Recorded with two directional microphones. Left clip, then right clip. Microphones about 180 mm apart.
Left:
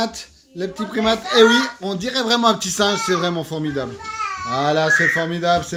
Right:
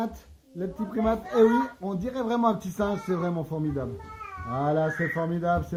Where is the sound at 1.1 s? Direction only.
45° left (ahead or behind).